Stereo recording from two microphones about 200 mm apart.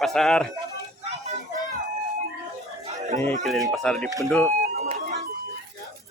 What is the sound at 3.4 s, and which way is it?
A man's voice, centre (ahead or behind).